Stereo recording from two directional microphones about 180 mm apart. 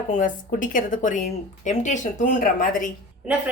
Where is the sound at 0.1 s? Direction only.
45° left (ahead or behind).